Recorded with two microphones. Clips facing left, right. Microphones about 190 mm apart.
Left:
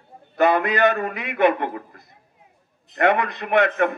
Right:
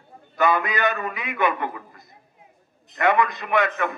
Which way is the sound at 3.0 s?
65° left (ahead or behind).